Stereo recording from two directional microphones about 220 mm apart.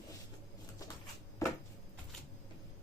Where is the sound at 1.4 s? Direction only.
15° left (ahead or behind).